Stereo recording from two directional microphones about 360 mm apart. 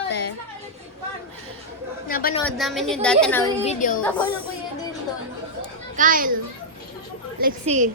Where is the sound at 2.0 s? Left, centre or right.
Left.